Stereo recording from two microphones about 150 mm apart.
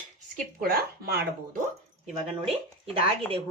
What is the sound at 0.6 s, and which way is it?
Speech, 90° right.